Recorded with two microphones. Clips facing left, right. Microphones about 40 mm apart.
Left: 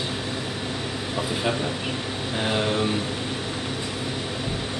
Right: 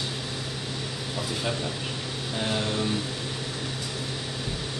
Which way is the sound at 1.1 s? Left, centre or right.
Left.